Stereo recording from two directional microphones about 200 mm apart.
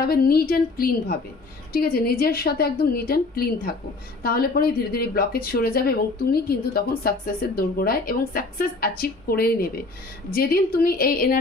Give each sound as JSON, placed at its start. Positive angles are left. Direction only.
{"t": 0.0, "sound": "speech", "side_deg": 50}